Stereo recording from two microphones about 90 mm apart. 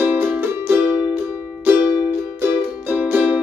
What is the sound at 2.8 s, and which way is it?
Music, 20° right (ahead or behind).